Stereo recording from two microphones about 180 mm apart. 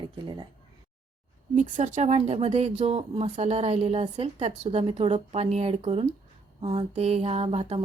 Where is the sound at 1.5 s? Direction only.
45° right (ahead or behind).